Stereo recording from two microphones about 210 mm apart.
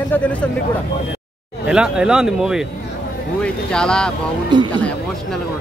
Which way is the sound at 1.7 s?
5° right (ahead or behind).